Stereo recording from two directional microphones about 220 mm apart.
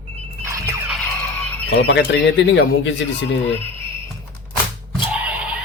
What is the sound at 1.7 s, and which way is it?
Speech, 55° left (ahead or behind).